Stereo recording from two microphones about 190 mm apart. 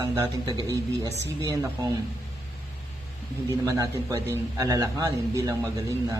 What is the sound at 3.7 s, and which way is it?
A man's voice, 20° right (ahead or behind).